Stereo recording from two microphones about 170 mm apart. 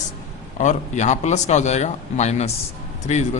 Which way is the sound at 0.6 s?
45° left (ahead or behind).